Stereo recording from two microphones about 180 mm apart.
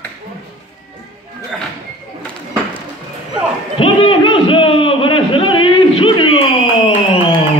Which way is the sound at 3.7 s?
30° left (ahead or behind).